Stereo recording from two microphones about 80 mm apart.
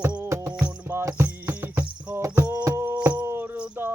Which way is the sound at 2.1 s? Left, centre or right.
Right.